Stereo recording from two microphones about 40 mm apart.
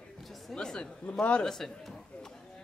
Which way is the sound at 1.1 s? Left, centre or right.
Left.